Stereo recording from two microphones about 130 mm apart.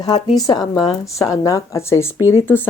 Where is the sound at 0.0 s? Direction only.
30° left (ahead or behind).